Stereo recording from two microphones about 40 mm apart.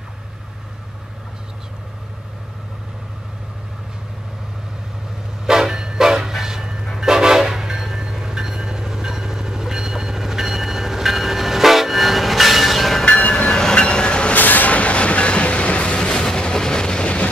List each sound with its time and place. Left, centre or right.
5.5 s train: centre
13.3 s train: left
14.3 s vehicle: left
14.7 s train: left